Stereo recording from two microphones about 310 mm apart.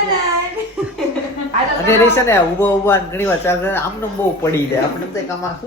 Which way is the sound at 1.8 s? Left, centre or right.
Centre.